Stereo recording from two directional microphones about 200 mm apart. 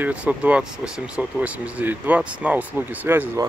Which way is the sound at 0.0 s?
5° right (ahead or behind).